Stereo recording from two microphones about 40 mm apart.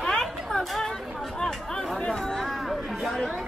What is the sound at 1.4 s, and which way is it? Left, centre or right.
Chatter, centre.